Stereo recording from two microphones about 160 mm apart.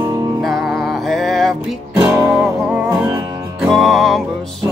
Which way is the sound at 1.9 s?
15° right (ahead or behind).